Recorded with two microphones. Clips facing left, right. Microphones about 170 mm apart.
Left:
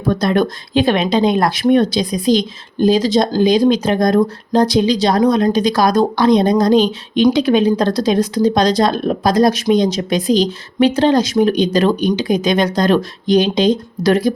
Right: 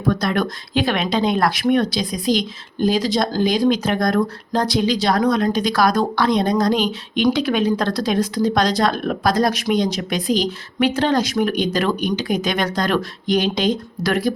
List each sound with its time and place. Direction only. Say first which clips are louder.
0.1 s speech: left 5 dB; 25° left (ahead or behind)